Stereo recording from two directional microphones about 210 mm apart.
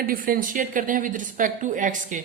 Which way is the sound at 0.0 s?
45° right (ahead or behind).